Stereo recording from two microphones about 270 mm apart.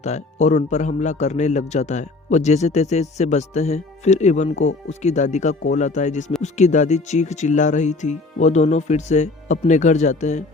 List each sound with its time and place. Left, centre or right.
0.0 s a man's voice: left